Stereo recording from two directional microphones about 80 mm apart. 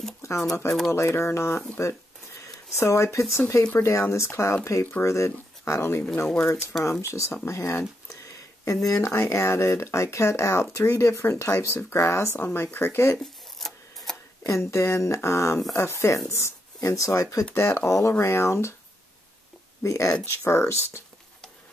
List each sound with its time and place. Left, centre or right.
0.2 s a sound: left
0.7 s speech: centre
0.9 s speech: left
6.2 s speech: centre
6.8 s speech: left
8.8 s speech: left
13.2 s a sound: centre
14.4 s speech: left
17.6 s speech: left
19.8 s speech: left